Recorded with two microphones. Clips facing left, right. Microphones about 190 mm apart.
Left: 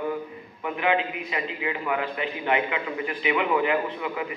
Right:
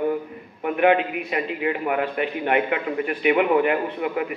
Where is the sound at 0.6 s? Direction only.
55° right (ahead or behind).